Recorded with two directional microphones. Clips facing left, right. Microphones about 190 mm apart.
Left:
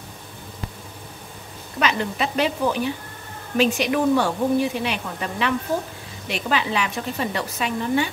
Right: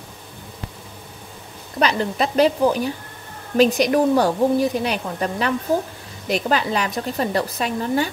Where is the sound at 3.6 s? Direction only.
40° right (ahead or behind).